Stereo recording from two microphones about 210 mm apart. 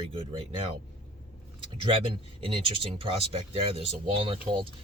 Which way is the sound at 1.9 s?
25° right (ahead or behind).